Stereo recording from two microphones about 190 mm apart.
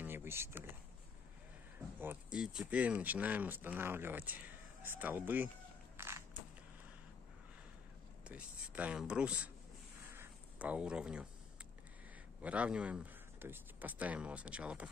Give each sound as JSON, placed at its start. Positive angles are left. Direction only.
{"t": 0.0, "sound": "a sound", "side_deg": -10}
{"t": 2.3, "sound": "speech", "side_deg": -5}
{"t": 5.9, "sound": "crushing", "side_deg": -15}
{"t": 8.2, "sound": "speech", "side_deg": -5}
{"t": 10.1, "sound": "a sound", "side_deg": -10}
{"t": 12.4, "sound": "speech", "side_deg": -5}